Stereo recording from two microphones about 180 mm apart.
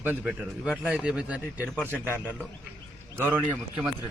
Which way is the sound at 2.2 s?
5° left (ahead or behind).